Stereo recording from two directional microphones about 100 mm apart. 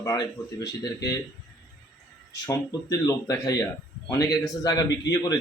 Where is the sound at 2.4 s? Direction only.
35° left (ahead or behind).